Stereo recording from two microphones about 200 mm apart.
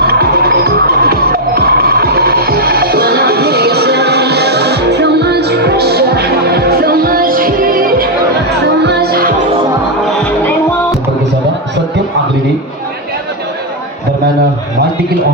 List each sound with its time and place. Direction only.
0.0 s music: 50° right (ahead or behind)
8.4 s music: 55° right (ahead or behind)
10.2 s music: 5° left (ahead or behind)